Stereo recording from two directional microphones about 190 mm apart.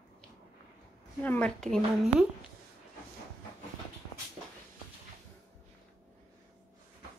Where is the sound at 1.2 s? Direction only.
5° left (ahead or behind).